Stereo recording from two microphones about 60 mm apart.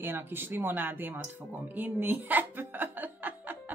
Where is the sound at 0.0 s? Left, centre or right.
Right.